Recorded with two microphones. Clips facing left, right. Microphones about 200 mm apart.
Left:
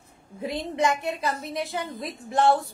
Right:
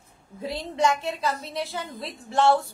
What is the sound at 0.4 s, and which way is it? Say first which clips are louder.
A woman's voice: even; 20° left (ahead or behind).